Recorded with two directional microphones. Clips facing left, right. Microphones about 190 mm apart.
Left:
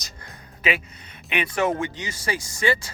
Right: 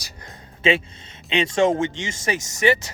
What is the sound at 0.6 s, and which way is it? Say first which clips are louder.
Speech: right 6 dB; 25° right (ahead or behind).